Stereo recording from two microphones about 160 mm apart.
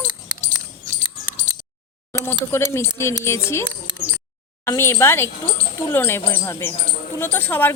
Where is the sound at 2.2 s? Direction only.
15° left (ahead or behind).